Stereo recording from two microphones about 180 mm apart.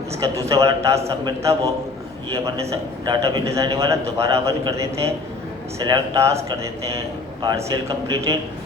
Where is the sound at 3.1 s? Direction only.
20° right (ahead or behind).